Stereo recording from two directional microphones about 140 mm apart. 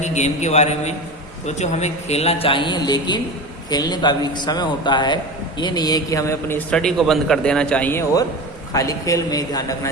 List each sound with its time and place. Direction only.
0.0 s a man's voice: 55° left (ahead or behind); by 6.6 s 20° left (ahead or behind)
6.7 s a man's voice: 5° left (ahead or behind)
8.7 s a man's voice: 25° left (ahead or behind)